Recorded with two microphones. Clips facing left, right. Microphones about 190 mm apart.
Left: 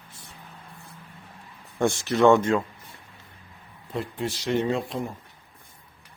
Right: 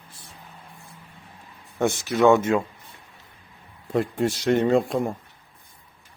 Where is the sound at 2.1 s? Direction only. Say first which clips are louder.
Right 1 dB; 5° right (ahead or behind).